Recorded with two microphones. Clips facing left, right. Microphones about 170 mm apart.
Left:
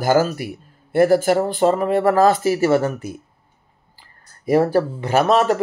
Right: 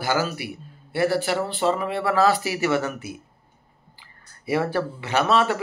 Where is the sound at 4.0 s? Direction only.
40° left (ahead or behind).